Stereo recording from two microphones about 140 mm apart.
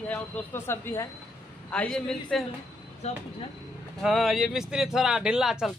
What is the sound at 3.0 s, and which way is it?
Speech, 50° left (ahead or behind).